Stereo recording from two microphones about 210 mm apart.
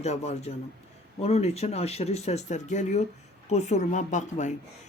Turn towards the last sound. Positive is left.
turn(degrees=35)  # may be behind; listen again after turning